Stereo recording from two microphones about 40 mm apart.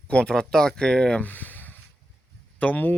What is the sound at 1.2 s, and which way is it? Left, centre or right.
Speech, left.